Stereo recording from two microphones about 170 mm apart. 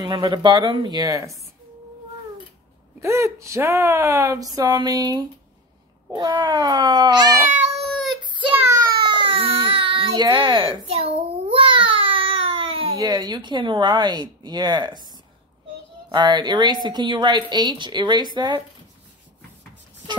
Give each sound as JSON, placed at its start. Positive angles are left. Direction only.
{"t": 0.0, "sound": "a woman's voice", "side_deg": -25}
{"t": 3.0, "sound": "a woman's voice", "side_deg": -15}
{"t": 8.4, "sound": "a sound", "side_deg": -15}
{"t": 9.1, "sound": "baby cry", "side_deg": -30}
{"t": 13.0, "sound": "a woman's voice", "side_deg": -25}
{"t": 16.1, "sound": "a woman's voice", "side_deg": -25}